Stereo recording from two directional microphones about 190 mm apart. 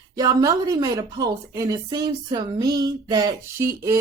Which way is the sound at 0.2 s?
20° right (ahead or behind).